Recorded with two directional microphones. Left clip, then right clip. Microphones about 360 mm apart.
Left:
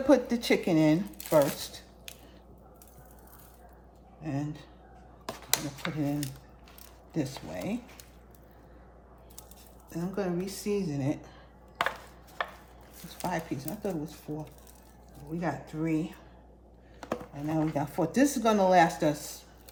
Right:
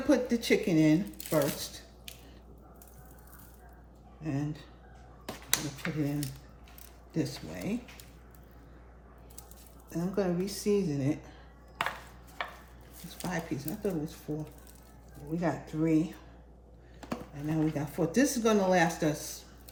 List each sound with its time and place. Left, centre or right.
0.1 s speech: centre
4.2 s a woman's voice: centre
5.8 s speech: centre
9.9 s a woman's voice: centre
12.4 s chopping: centre
13.1 s a woman's voice: centre
17.1 s speech: centre